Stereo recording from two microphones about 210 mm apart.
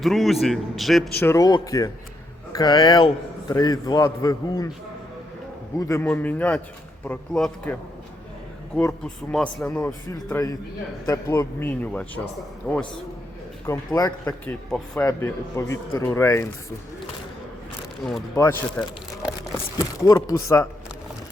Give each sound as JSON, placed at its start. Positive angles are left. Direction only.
{"t": 0.0, "sound": "a man's voice", "side_deg": 0}
{"t": 1.2, "sound": "speech", "side_deg": 15}
{"t": 5.8, "sound": "speech", "side_deg": 10}
{"t": 8.8, "sound": "speech", "side_deg": 5}
{"t": 13.7, "sound": "speech", "side_deg": 15}
{"t": 18.3, "sound": "speech", "side_deg": 10}
{"t": 20.0, "sound": "speech", "side_deg": 15}